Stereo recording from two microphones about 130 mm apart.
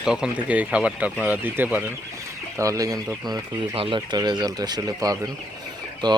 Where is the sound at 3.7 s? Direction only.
45° right (ahead or behind).